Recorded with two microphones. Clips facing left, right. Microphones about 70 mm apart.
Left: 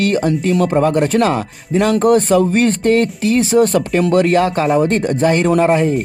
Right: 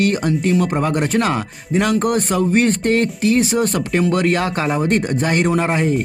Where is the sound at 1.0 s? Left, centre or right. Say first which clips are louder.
Left 3 dB; right.